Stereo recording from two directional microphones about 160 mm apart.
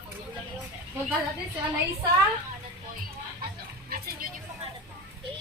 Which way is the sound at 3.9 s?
70° right (ahead or behind).